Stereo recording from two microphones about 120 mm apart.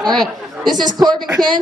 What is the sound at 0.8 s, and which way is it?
Speech, 35° right (ahead or behind).